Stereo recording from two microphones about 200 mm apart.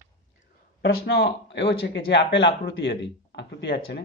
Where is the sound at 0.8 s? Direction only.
65° left (ahead or behind).